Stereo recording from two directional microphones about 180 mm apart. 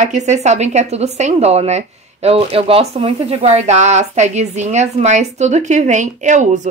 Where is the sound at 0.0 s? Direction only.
40° right (ahead or behind).